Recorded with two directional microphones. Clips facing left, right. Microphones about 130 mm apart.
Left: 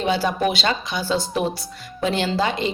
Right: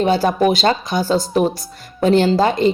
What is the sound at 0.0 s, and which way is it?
A woman's voice, 45° right (ahead or behind).